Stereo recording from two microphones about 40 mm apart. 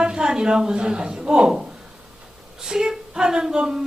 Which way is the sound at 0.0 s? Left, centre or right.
Centre.